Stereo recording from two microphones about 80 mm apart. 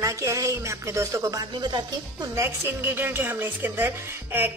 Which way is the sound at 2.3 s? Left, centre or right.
Right.